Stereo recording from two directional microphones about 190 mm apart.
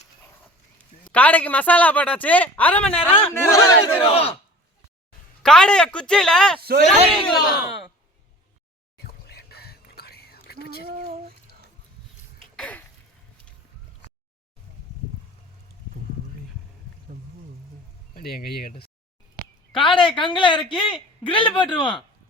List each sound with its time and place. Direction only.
1.1 s speech: 10° left (ahead or behind)
4.1 s speech: 30° left (ahead or behind)
5.4 s speech: 5° left (ahead or behind)
6.6 s speech: 55° right (ahead or behind)
7.3 s speech: centre (ahead or behind)
9.0 s whispering: 55° left (ahead or behind)
10.8 s a sound: 50° right (ahead or behind)
12.4 s cough: 5° left (ahead or behind)
18.1 s speech: 50° left (ahead or behind)
19.7 s speech: 25° left (ahead or behind)